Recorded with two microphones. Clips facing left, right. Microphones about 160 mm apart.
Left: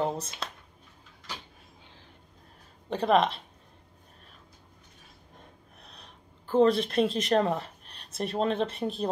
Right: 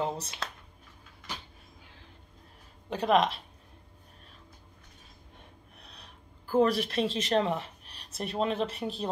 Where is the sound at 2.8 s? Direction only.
35° left (ahead or behind).